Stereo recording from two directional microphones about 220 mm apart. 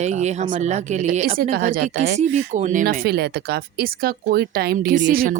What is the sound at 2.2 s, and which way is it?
Speech, 30° right (ahead or behind).